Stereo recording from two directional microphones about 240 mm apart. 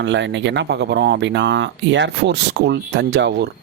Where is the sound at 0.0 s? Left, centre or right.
Right.